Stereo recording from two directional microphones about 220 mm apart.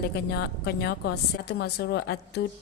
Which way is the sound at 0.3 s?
45° left (ahead or behind).